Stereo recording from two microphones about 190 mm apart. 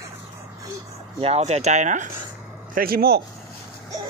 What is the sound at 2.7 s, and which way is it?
Speech, 50° right (ahead or behind).